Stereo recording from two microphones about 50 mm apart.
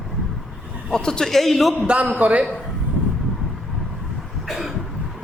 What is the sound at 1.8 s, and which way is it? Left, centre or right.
Speech, right.